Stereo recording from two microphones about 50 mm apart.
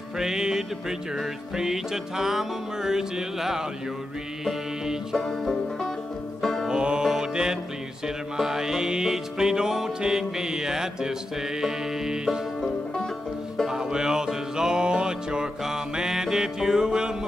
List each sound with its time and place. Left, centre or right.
0.2 s music: centre
5.1 s music: centre
6.7 s music: centre
13.7 s music: centre